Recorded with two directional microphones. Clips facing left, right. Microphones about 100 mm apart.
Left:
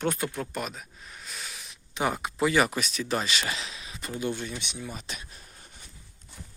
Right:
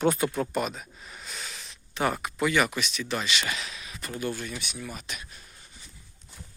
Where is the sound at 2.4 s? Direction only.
30° left (ahead or behind).